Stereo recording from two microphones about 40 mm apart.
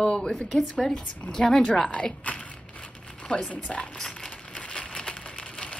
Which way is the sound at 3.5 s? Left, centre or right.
Left.